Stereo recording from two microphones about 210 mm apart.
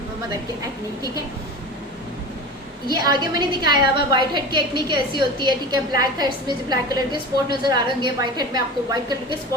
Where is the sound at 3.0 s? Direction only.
20° right (ahead or behind).